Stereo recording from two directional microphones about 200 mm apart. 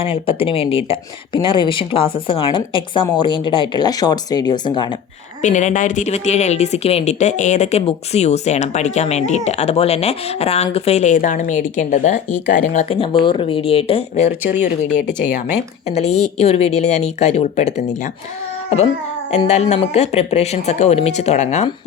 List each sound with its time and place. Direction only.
0.0 s a woman's voice: 30° left (ahead or behind)
5.4 s a woman's voice: 40° left (ahead or behind)
15.9 s speech: 30° left (ahead or behind)
19.5 s speech: 35° left (ahead or behind)